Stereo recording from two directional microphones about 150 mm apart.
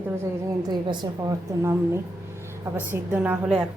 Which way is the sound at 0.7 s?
30° right (ahead or behind).